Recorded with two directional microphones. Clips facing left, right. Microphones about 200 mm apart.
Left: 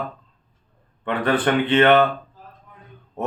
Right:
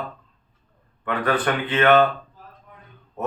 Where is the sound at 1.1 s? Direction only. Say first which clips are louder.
Left 2 dB; 25° left (ahead or behind).